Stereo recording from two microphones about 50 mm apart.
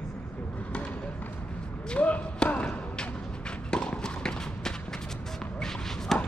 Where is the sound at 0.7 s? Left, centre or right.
Left.